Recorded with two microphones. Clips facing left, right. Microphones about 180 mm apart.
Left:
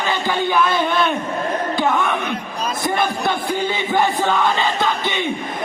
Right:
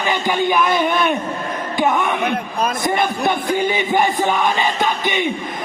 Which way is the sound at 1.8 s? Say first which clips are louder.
Right 3 dB; 15° right (ahead or behind).